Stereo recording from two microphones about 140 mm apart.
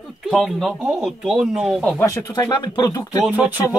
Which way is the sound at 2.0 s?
20° left (ahead or behind).